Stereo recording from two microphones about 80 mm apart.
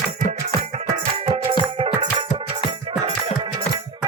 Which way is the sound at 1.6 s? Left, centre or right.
Right.